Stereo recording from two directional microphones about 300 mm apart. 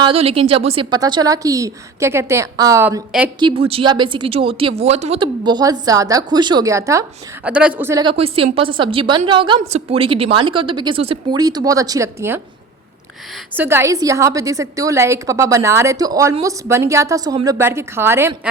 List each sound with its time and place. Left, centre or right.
0.0 s a woman's voice: centre
3.4 s a woman's voice: centre
13.6 s a woman's voice: centre